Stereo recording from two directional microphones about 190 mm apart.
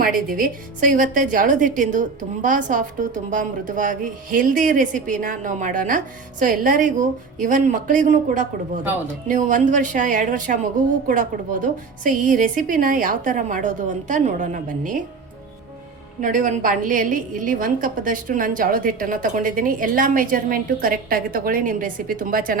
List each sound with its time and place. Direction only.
0.0 s a woman's voice: 45° right (ahead or behind)
16.2 s a woman's voice: 40° right (ahead or behind)